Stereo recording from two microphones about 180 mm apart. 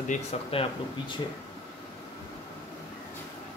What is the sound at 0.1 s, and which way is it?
Speech, 35° left (ahead or behind).